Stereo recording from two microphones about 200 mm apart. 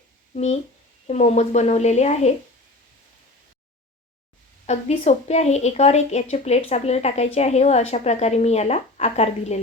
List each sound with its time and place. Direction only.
0.3 s a woman's voice: 35° left (ahead or behind)
4.6 s a woman's voice: 35° left (ahead or behind)